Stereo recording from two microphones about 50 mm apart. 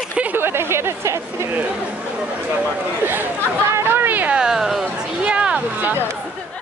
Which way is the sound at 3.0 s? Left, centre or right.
Right.